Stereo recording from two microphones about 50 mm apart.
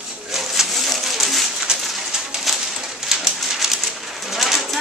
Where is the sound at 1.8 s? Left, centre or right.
Centre.